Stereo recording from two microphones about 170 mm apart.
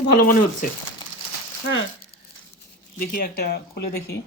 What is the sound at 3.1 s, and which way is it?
Speech, 60° left (ahead or behind).